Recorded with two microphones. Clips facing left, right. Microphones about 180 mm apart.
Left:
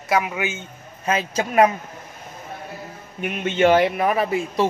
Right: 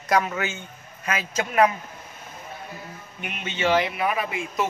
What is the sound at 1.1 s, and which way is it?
Speech, 30° left (ahead or behind).